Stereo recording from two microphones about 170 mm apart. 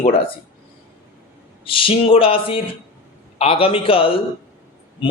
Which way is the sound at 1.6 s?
30° left (ahead or behind).